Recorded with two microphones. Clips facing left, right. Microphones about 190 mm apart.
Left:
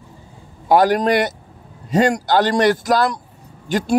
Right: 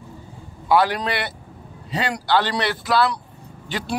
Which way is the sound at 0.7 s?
45° left (ahead or behind).